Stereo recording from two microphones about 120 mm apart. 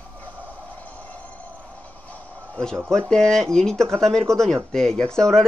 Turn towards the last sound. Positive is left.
turn(degrees=5)  # may be behind; listen again after turning